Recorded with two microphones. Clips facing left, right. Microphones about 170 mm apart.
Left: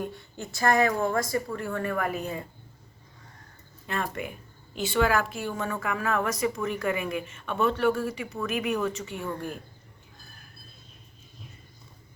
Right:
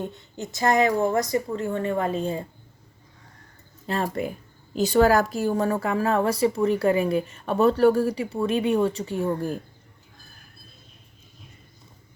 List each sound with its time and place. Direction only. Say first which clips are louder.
0.0 s a woman's voice: right 2 dB; 20° right (ahead or behind)
3.8 s a woman's voice: right 6 dB; 30° right (ahead or behind)